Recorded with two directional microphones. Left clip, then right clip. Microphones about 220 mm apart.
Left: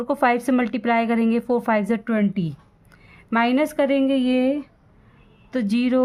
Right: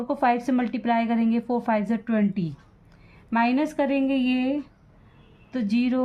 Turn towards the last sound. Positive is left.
turn(degrees=45)  # may be behind; listen again after turning